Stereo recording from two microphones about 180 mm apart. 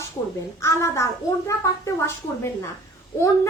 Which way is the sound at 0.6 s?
15° left (ahead or behind).